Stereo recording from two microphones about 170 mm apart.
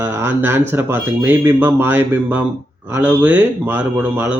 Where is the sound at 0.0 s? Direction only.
15° right (ahead or behind).